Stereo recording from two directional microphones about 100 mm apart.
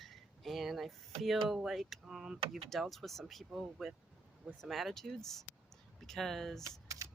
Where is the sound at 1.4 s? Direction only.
5° right (ahead or behind).